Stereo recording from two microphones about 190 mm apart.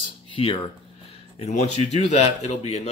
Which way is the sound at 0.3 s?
30° left (ahead or behind).